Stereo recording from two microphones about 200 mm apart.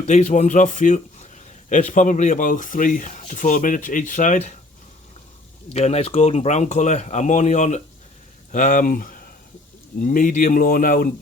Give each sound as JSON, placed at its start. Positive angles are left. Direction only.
{"t": 0.0, "sound": "speech", "side_deg": 35}
{"t": 5.7, "sound": "speech", "side_deg": 35}